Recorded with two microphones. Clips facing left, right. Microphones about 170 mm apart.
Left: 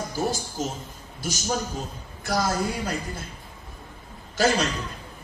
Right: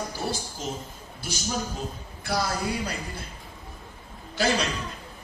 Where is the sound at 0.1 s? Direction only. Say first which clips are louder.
Left 4 dB; 45° left (ahead or behind).